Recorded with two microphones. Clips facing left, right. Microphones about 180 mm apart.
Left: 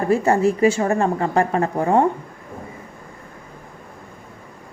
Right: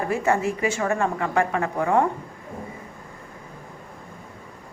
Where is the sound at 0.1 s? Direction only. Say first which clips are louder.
Left 7 dB; 35° left (ahead or behind).